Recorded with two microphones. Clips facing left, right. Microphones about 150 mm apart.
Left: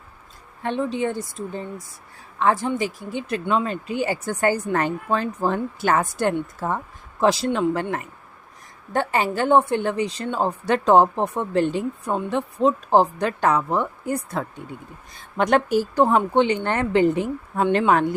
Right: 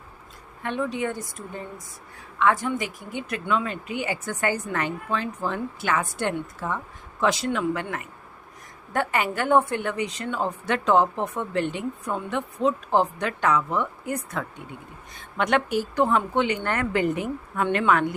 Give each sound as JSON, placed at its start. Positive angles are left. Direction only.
{"t": 0.6, "sound": "a woman's voice", "side_deg": 30}